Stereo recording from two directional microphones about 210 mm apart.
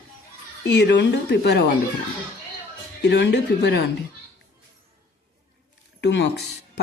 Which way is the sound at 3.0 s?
55° left (ahead or behind).